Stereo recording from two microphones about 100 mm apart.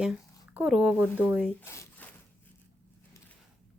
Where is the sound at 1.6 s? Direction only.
30° left (ahead or behind).